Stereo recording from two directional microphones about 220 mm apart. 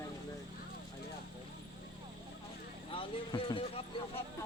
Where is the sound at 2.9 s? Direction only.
25° left (ahead or behind).